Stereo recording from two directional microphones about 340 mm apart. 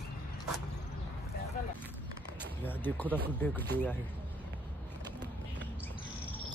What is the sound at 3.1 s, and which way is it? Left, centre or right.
Speech, centre.